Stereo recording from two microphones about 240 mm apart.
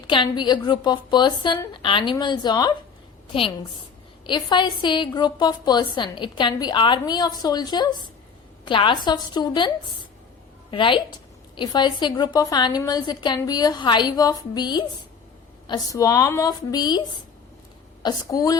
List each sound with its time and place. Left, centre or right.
0.1 s a woman's voice: centre
4.3 s a woman's voice: centre
18.0 s a woman's voice: centre